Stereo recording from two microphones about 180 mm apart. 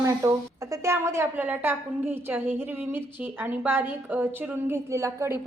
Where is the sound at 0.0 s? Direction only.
15° right (ahead or behind).